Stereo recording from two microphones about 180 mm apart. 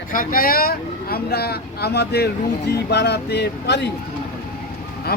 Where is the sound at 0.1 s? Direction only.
50° left (ahead or behind); by 3.8 s 70° left (ahead or behind).